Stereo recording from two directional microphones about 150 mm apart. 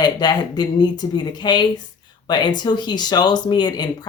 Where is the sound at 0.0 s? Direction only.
25° left (ahead or behind).